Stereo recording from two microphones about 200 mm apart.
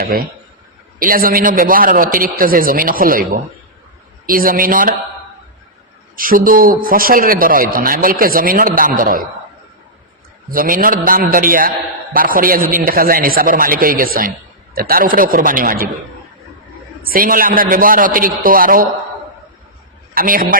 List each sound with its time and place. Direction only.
0.0 s a man's voice: 45° right (ahead or behind)
6.1 s a man's voice: 45° right (ahead or behind)
10.5 s a man's voice: 45° right (ahead or behind)
17.0 s a man's voice: 45° right (ahead or behind)
20.1 s a man's voice: 45° right (ahead or behind)